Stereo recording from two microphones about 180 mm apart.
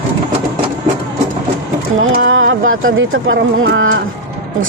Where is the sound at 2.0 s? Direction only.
90° right.